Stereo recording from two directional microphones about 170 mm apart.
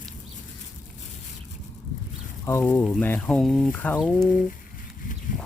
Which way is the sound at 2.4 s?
15° left (ahead or behind).